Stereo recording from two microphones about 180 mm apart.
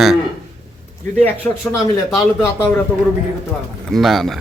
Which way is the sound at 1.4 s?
5° right (ahead or behind).